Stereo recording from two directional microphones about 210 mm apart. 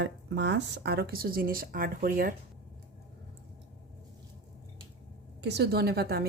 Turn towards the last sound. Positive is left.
turn(degrees=-50)  # may be behind; listen again after turning